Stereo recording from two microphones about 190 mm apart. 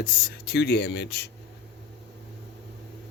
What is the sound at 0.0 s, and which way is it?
Speech, 60° left (ahead or behind).